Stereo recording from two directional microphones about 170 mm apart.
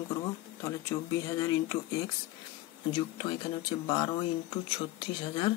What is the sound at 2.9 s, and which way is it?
Speech, 30° left (ahead or behind).